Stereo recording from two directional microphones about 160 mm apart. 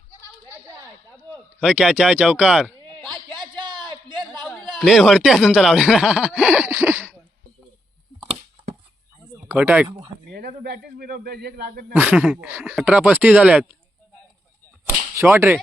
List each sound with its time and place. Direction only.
0.1 s a sound: 15° right (ahead or behind)
1.5 s speech: 5° right (ahead or behind)
2.8 s a sound: 25° right (ahead or behind)
4.3 s speech: centre (ahead or behind)
9.5 s speech: 10° right (ahead or behind)
10.3 s speech: 70° right (ahead or behind)
11.9 s speech: 10° right (ahead or behind)
14.8 s whip: 15° right (ahead or behind)